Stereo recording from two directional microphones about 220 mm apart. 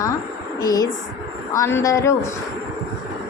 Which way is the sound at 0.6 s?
15° left (ahead or behind).